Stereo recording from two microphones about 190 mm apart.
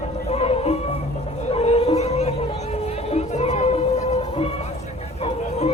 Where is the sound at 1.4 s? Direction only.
35° left (ahead or behind).